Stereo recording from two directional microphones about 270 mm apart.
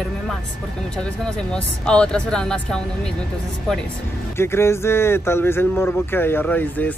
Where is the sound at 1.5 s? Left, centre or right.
Centre.